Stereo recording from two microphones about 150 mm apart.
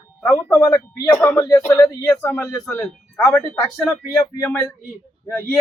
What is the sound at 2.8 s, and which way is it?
Speech, 10° left (ahead or behind).